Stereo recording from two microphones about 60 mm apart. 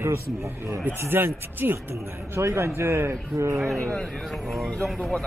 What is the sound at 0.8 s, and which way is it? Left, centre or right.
Speech, right.